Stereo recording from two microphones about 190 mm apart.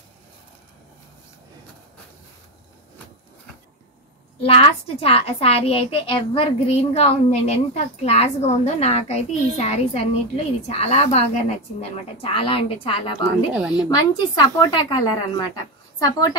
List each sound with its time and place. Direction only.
4.4 s a woman's voice: 30° left (ahead or behind)